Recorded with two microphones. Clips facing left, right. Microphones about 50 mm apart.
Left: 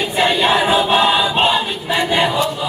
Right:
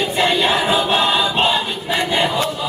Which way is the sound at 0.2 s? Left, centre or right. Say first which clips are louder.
Left 3 dB; centre.